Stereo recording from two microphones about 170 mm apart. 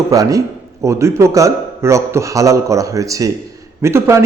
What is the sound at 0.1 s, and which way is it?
A man's voice, 20° right (ahead or behind).